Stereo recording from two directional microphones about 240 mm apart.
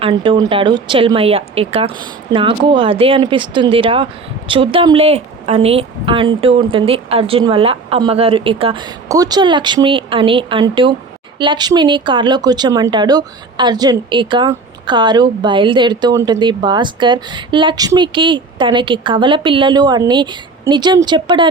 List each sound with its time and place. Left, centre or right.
0.0 s speech: centre